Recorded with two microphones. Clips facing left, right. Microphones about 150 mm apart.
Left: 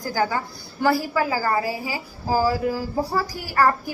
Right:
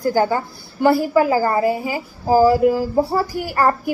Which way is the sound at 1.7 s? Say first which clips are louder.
Right 7 dB; 50° right (ahead or behind).